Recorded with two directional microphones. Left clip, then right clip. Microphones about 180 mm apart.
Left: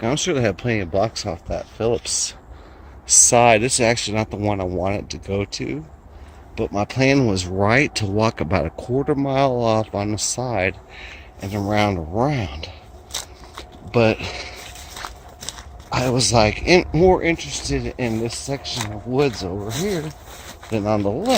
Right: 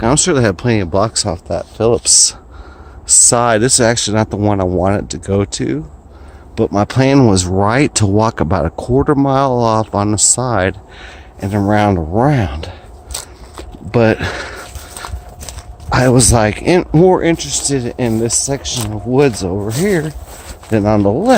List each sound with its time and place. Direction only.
0.0 s speech: 30° right (ahead or behind)
13.9 s speech: 45° right (ahead or behind)
15.9 s speech: 45° right (ahead or behind)
20.7 s speech: 45° right (ahead or behind)